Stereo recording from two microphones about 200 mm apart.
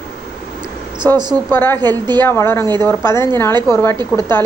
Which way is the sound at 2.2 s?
10° left (ahead or behind).